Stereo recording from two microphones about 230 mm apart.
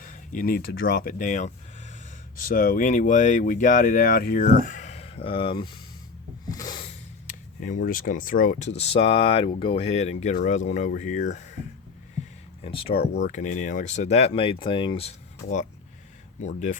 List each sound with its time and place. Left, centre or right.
0.0 s speech: left
6.5 s a sound: centre
7.3 s speech: left
12.6 s speech: left